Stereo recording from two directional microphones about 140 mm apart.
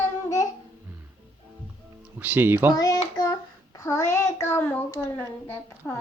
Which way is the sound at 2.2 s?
15° right (ahead or behind).